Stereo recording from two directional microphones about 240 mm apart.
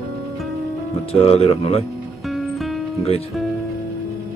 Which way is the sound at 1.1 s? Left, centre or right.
Left.